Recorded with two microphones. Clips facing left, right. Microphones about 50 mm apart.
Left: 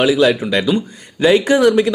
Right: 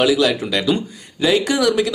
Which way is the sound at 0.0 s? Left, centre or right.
Left.